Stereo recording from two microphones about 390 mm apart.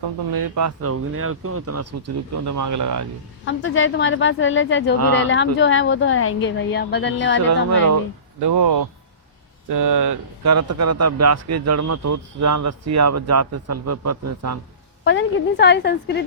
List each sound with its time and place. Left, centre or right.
0.3 s speech: right
3.4 s a woman's voice: left
7.4 s speech: right
15.0 s a woman's voice: left